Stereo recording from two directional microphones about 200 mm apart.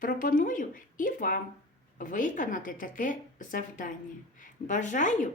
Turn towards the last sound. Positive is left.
turn(degrees=40)  # may be behind; listen again after turning